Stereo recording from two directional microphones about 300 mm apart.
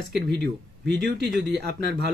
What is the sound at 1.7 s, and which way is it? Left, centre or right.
Speech, right.